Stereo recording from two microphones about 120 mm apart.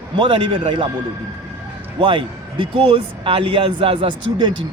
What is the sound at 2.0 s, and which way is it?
A man's voice, 45° right (ahead or behind).